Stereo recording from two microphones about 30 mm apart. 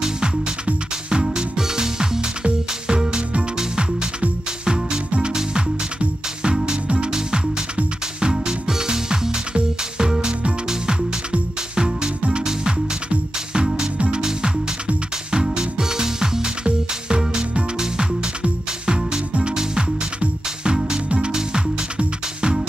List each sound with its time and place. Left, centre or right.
1.1 s music: right
6.6 s music: right
11.7 s music: right
15.3 s music: right
18.9 s music: right
20.6 s music: right